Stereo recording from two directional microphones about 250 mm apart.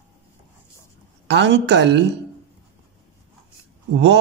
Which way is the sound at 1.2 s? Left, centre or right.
Right.